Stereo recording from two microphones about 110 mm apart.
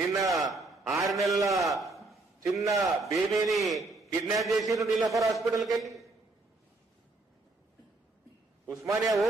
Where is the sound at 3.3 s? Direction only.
Centre (ahead or behind).